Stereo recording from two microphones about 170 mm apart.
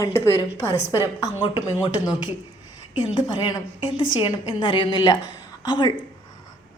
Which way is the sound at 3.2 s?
25° left (ahead or behind).